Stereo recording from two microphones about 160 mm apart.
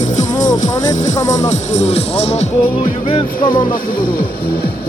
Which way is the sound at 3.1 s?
30° left (ahead or behind).